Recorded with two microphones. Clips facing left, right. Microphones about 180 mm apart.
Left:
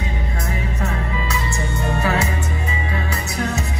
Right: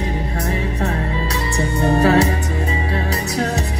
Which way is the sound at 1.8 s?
35° right (ahead or behind).